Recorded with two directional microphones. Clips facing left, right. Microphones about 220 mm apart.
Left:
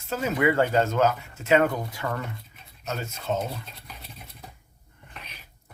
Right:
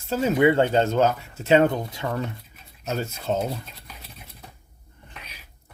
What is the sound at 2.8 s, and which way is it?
Speech, 35° right (ahead or behind).